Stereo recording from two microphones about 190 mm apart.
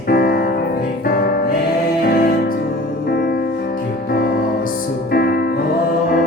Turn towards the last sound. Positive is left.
turn(degrees=55)  # may be behind; listen again after turning